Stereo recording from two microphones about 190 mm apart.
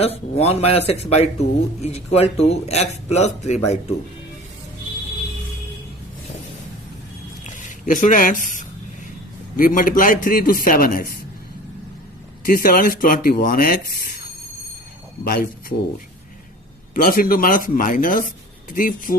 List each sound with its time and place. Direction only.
0.0 s a man's voice: 35° left (ahead or behind)
7.4 s a man's voice: 40° left (ahead or behind)
12.5 s a man's voice: 50° left (ahead or behind)
15.2 s speech: 50° left (ahead or behind)
16.9 s a man's voice: 50° left (ahead or behind)